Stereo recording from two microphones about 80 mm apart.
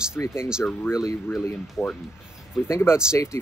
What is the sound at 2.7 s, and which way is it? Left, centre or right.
Speech, left.